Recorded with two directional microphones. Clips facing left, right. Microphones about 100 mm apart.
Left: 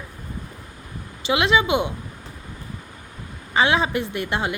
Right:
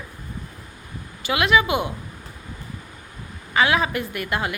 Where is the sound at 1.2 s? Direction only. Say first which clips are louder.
Even; 25° left (ahead or behind).